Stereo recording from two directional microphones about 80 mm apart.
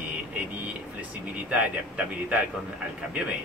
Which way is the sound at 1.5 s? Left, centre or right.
Centre.